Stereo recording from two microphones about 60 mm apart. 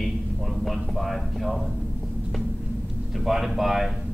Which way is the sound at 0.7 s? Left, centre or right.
Centre.